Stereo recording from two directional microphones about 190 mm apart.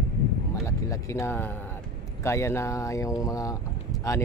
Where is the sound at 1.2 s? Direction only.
10° left (ahead or behind).